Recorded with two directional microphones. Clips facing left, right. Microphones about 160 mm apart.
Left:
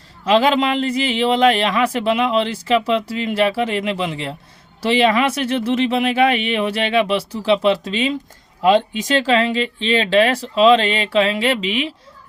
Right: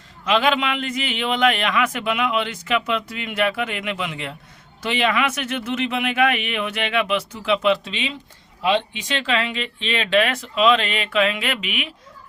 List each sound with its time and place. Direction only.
0.3 s a man's voice: 35° left (ahead or behind)